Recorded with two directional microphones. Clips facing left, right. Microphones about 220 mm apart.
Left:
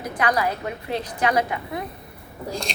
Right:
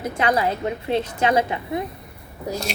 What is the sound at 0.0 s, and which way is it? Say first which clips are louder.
A woman's voice: right 2 dB; 25° right (ahead or behind).